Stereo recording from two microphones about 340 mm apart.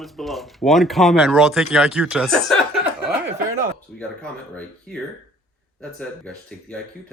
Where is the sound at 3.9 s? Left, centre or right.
Centre.